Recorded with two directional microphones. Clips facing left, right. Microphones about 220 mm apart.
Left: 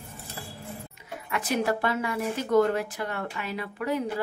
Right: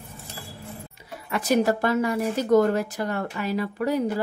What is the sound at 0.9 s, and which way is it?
Speech, 35° right (ahead or behind).